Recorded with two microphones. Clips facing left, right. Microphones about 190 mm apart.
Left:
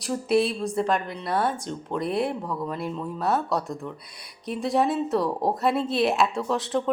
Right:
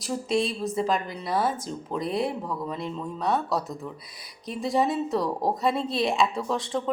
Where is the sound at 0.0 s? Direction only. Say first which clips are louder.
Left 3 dB; centre (ahead or behind).